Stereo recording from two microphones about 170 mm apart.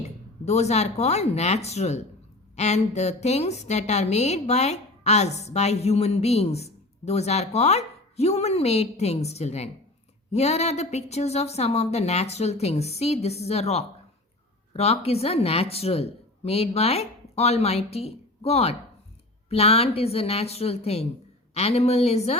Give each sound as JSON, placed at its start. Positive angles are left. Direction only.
{"t": 0.4, "sound": "a woman's voice", "side_deg": 40}